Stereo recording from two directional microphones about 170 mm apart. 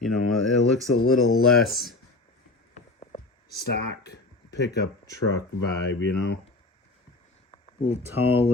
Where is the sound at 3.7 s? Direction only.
80° left.